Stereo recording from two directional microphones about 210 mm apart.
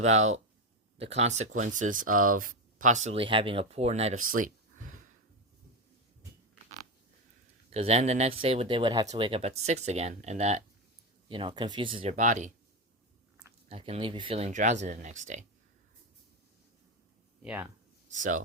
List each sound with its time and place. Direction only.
0.0 s speech: 35° right (ahead or behind)
7.7 s speech: 30° right (ahead or behind)
13.7 s speech: 30° right (ahead or behind)
17.4 s speech: 5° right (ahead or behind)
18.1 s speech: 40° right (ahead or behind)